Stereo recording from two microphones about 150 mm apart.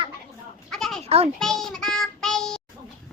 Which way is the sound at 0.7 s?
5° left (ahead or behind).